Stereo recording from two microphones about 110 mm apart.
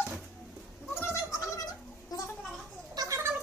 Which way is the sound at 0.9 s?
25° left (ahead or behind).